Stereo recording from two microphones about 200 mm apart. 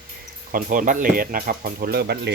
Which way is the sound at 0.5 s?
40° right (ahead or behind).